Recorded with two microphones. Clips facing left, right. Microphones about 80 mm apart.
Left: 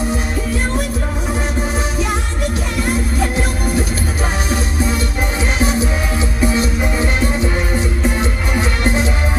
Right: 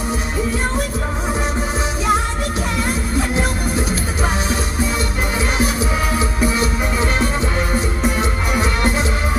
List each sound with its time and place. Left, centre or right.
6.4 s music: left